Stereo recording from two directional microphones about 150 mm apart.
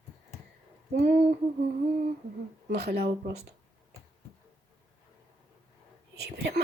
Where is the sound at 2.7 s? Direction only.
90° right.